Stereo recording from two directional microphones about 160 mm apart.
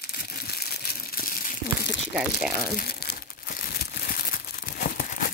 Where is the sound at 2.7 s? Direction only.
75° left (ahead or behind).